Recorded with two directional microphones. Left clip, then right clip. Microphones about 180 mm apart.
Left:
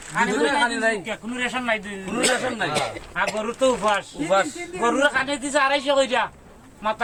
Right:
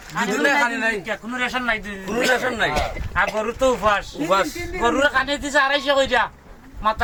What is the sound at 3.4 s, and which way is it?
A man's voice, centre (ahead or behind).